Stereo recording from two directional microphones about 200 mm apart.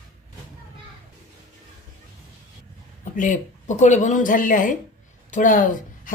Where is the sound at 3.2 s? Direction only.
40° left (ahead or behind).